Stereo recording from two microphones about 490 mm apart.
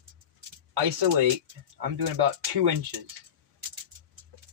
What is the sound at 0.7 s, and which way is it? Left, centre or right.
Speech, right.